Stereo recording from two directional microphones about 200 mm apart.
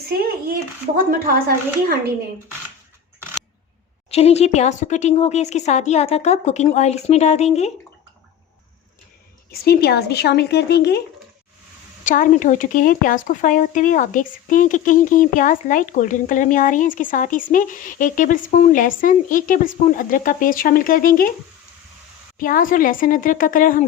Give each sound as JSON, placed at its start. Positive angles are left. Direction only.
{"t": 0.2, "sound": "a sound", "side_deg": -50}
{"t": 1.3, "sound": "a woman's voice", "side_deg": -50}
{"t": 4.1, "sound": "speech", "side_deg": 30}
{"t": 9.5, "sound": "speech", "side_deg": 50}
{"t": 12.0, "sound": "speech", "side_deg": 40}
{"t": 22.4, "sound": "a woman's voice", "side_deg": 45}